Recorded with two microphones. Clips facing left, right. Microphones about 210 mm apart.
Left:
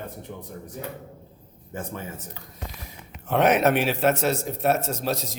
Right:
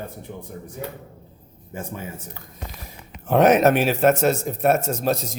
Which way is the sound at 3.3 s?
45° right (ahead or behind).